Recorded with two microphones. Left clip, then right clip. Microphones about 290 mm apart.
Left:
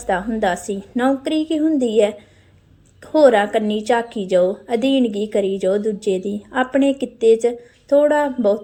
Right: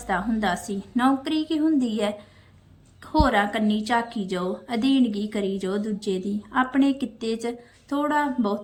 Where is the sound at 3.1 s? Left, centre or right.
Centre.